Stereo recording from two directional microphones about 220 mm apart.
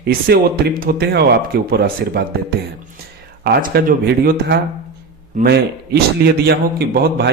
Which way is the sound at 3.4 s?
45° right (ahead or behind).